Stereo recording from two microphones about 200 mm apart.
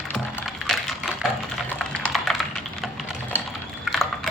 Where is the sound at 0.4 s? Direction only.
Centre (ahead or behind).